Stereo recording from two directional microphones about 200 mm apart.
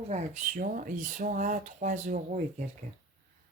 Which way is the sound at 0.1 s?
40° right (ahead or behind).